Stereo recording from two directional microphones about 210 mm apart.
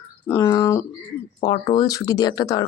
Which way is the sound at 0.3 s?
15° left (ahead or behind).